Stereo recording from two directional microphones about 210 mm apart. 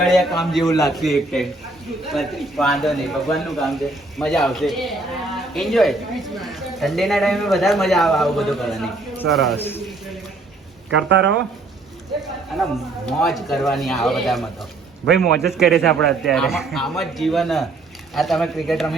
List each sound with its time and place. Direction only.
0.0 s speech: centre (ahead or behind)
9.6 s a man's voice: 10° left (ahead or behind)
10.9 s speech: 60° right (ahead or behind)
12.5 s speech: centre (ahead or behind)